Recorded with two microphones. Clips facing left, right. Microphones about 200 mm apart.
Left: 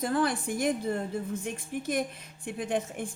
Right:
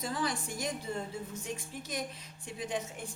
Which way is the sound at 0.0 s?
55° left (ahead or behind).